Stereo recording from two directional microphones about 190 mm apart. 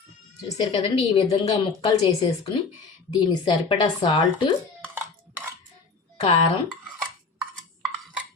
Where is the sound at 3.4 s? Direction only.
25° left (ahead or behind).